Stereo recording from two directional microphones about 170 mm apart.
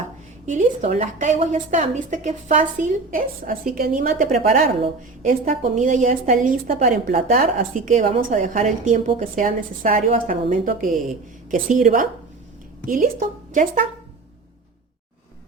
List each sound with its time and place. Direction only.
0.4 s a woman's voice: 45° right (ahead or behind)